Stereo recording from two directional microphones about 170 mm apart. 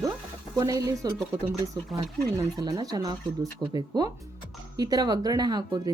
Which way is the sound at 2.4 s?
20° right (ahead or behind).